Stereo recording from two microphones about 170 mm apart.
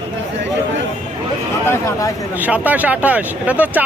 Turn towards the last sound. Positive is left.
turn(degrees=-10)  # may be behind; listen again after turning